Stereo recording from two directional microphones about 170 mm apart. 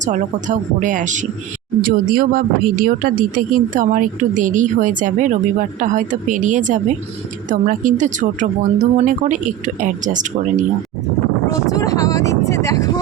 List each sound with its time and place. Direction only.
0.0 s a woman's voice: 45° right (ahead or behind)
11.4 s speech: 20° left (ahead or behind)